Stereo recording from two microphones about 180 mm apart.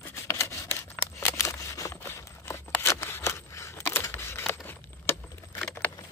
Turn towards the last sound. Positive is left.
turn(degrees=15)  # may be behind; listen again after turning